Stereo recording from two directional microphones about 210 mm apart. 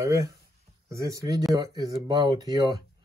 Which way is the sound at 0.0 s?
15° right (ahead or behind).